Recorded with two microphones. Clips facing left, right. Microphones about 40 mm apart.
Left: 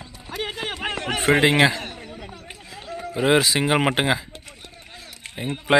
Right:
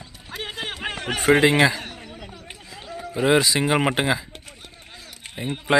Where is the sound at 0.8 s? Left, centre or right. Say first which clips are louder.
Left 2 dB; left.